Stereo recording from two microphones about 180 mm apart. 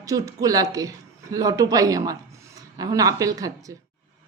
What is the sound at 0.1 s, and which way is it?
A woman's voice, 25° right (ahead or behind).